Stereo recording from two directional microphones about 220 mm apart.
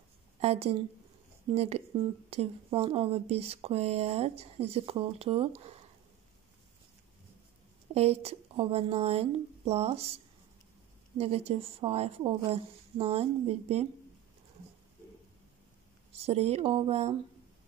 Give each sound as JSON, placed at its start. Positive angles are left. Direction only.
{"t": 0.4, "sound": "a woman's voice", "side_deg": -30}
{"t": 7.9, "sound": "speech", "side_deg": -30}
{"t": 11.1, "sound": "speech", "side_deg": -25}
{"t": 16.3, "sound": "speech", "side_deg": -30}